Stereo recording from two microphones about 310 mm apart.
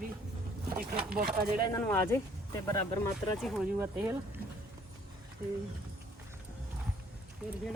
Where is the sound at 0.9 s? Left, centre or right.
Right.